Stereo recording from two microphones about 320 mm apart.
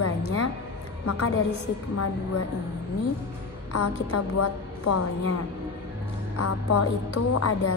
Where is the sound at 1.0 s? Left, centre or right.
Left.